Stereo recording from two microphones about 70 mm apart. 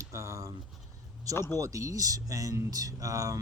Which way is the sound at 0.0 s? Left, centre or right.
Right.